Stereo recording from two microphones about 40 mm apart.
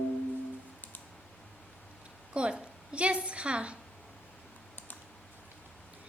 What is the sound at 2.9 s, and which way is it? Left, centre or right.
Speech, right.